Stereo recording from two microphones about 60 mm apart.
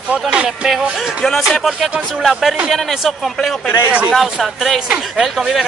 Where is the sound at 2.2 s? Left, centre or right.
Centre.